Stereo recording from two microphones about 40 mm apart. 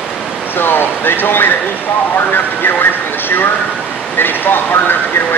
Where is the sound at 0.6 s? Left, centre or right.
Left.